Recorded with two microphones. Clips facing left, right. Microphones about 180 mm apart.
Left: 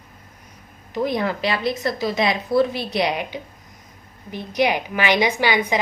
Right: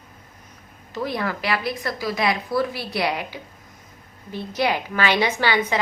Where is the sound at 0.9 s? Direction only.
20° left (ahead or behind).